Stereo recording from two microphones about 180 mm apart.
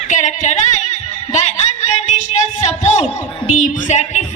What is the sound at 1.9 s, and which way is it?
A woman's voice, 40° left (ahead or behind).